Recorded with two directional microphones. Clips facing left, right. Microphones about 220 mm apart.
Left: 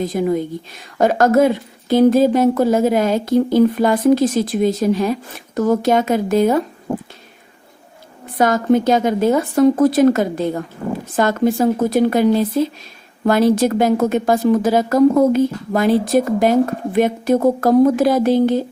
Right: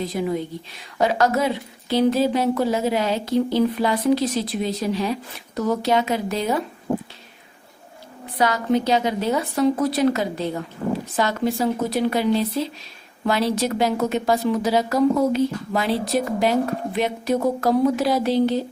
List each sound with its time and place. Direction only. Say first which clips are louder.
0.0 s a woman's voice: left 6 dB; 45° left (ahead or behind)
8.4 s a woman's voice: left 6 dB; 50° left (ahead or behind)